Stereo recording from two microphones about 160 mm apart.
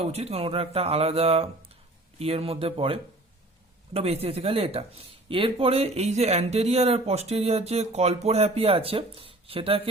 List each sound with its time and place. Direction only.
0.0 s speech: 40° right (ahead or behind)